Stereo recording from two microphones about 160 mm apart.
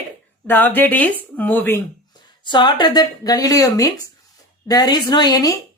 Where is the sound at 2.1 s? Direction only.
30° left (ahead or behind).